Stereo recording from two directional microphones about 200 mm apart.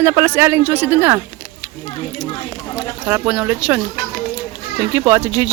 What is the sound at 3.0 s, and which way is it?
Speech, 5° right (ahead or behind).